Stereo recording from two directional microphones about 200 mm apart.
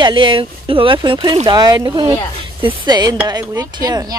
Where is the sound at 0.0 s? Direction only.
25° right (ahead or behind).